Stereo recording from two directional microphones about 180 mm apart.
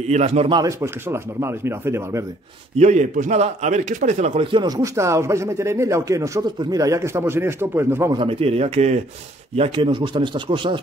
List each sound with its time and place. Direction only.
0.1 s speech: 35° right (ahead or behind)
0.6 s a man's voice: 15° right (ahead or behind)
2.8 s a man's voice: 40° right (ahead or behind); by 8.2 s 15° right (ahead or behind)
8.2 s speech: 30° right (ahead or behind)